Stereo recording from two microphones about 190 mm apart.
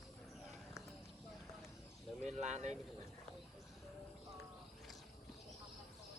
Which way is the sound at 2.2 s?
35° right (ahead or behind).